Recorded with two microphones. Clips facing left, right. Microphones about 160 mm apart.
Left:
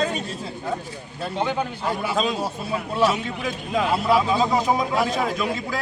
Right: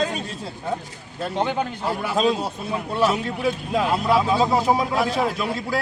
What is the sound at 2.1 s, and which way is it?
A man's voice, centre (ahead or behind).